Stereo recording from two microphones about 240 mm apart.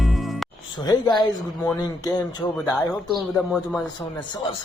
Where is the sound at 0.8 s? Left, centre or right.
Centre.